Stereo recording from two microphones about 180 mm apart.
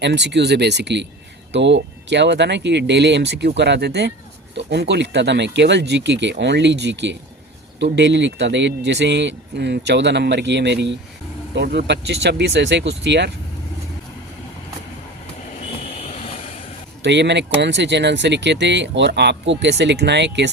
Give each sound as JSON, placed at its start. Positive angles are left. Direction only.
{"t": 0.0, "sound": "speech", "side_deg": -75}
{"t": 16.0, "sound": "vehicle", "side_deg": 35}
{"t": 17.0, "sound": "speech", "side_deg": -75}